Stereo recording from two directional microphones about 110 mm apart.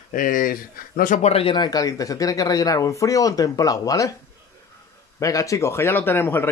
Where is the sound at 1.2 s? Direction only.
65° left (ahead or behind).